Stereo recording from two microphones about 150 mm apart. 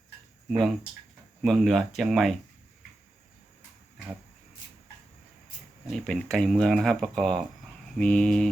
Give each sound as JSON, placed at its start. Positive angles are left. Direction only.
{"t": 0.4, "sound": "speech", "side_deg": 0}
{"t": 5.8, "sound": "speech", "side_deg": 0}